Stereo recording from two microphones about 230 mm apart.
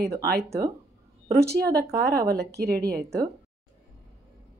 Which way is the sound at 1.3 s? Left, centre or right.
Right.